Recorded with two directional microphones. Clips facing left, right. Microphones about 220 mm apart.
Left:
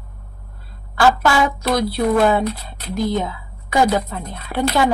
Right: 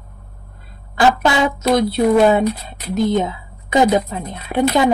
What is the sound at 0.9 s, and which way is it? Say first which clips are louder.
A woman's voice: right 1 dB; 20° right (ahead or behind).